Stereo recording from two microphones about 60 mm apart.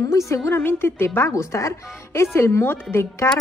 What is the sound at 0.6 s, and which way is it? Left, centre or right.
A woman's voice, left.